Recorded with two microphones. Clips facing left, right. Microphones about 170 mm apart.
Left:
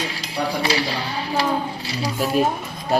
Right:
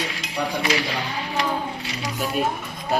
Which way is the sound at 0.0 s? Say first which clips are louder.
Left 2 dB; 35° left (ahead or behind).